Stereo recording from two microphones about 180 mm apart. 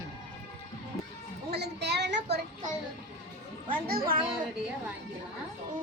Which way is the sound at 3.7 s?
55° right (ahead or behind).